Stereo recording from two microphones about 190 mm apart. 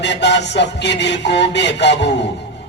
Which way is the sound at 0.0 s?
65° left (ahead or behind).